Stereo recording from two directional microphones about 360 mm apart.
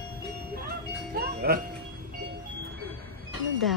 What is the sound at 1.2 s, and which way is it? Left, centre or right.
Speech, right.